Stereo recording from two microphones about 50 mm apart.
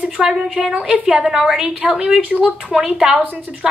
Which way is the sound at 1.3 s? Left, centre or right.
Centre.